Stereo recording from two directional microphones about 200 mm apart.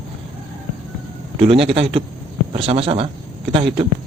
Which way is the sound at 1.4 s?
30° right (ahead or behind).